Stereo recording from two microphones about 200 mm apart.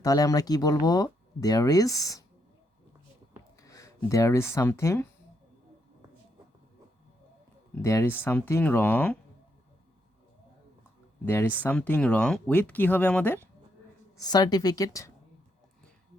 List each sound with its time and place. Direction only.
0.0 s speech: 15° left (ahead or behind)
3.6 s speech: 15° left (ahead or behind)
7.8 s speech: 15° left (ahead or behind)
11.6 s speech: 10° left (ahead or behind)
14.2 s a woman's voice: 20° left (ahead or behind)